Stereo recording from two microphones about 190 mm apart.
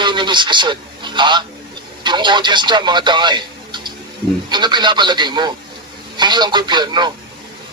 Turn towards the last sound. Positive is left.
turn(degrees=-25)  # may be behind; listen again after turning